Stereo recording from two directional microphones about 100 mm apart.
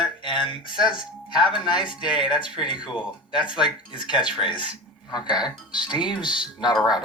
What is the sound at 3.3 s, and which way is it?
Speech, 50° left (ahead or behind).